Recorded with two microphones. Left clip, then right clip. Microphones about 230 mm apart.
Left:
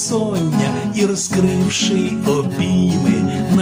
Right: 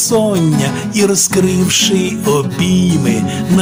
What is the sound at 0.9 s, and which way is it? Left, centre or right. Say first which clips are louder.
Music: right 7 dB; right.